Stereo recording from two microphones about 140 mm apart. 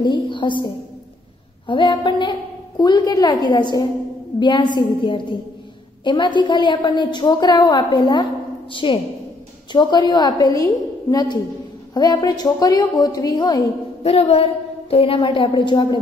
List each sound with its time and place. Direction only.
0.0 s a woman's voice: 35° left (ahead or behind)
1.7 s a woman's voice: 35° left (ahead or behind)
14.0 s a woman's voice: 45° left (ahead or behind)